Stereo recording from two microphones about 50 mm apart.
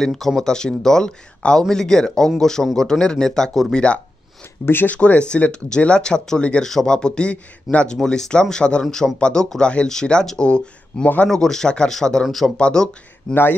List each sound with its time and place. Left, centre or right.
0.0 s a man's voice: centre
6.6 s a man's voice: centre
12.5 s a man's voice: centre
13.3 s speech: left